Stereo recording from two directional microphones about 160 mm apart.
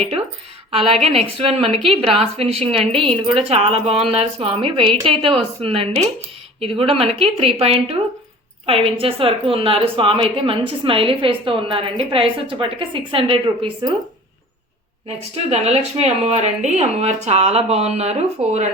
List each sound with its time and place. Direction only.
0.8 s a woman's voice: 35° right (ahead or behind)
15.0 s a woman's voice: 40° right (ahead or behind)